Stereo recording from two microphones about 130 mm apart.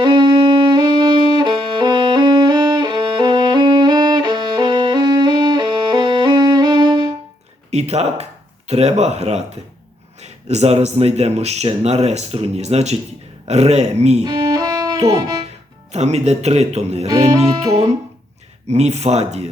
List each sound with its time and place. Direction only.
0.0 s music: 35° right (ahead or behind)
7.7 s speech: 55° right (ahead or behind)
14.3 s music: 30° right (ahead or behind)
15.9 s speech: 60° right (ahead or behind)
17.1 s speech: 30° right (ahead or behind)
18.7 s speech: 55° right (ahead or behind)